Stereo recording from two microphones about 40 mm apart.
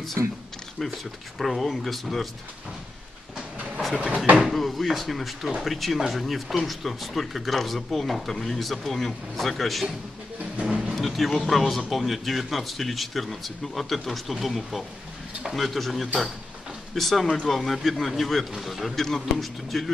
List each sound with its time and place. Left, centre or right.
1.4 s speech: centre
3.9 s speech: right
4.5 s speech: centre
10.6 s speech: centre
11.0 s speech: centre